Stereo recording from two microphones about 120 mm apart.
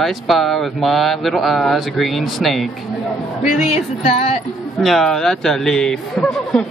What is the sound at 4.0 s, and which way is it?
Speech, 60° left (ahead or behind).